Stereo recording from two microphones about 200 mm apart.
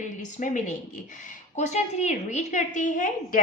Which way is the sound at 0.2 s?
40° left (ahead or behind).